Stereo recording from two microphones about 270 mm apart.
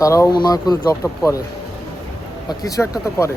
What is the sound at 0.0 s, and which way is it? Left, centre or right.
Speech, centre.